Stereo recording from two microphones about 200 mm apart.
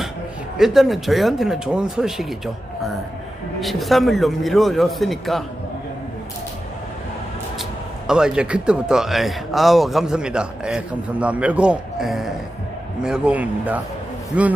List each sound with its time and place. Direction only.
0.6 s speech: centre (ahead or behind)
3.6 s speech: centre (ahead or behind)
8.0 s a man's voice: 5° right (ahead or behind)